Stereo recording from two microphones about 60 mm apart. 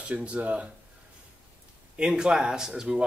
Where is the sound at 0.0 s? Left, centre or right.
Centre.